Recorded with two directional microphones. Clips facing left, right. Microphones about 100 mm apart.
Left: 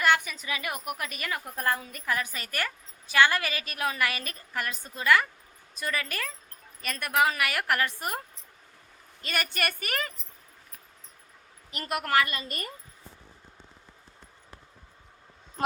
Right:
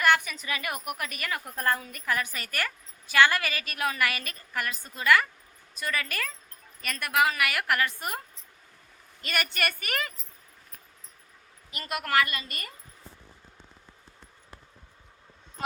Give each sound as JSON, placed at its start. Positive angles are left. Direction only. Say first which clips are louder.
{"t": 0.0, "sound": "a woman's voice", "louder": "right 1 dB", "side_deg": 20}
{"t": 1.5, "sound": "a woman's voice", "louder": "right 1 dB", "side_deg": 10}
{"t": 1.8, "sound": "a woman's voice", "louder": "right 1 dB", "side_deg": 30}
{"t": 9.2, "sound": "a woman's voice", "louder": "right 1 dB", "side_deg": 30}
{"t": 11.9, "sound": "a woman's voice", "louder": "left 1 dB", "side_deg": 30}